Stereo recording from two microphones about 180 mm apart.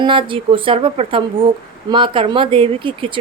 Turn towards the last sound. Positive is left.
turn(degrees=-30)  # may be behind; listen again after turning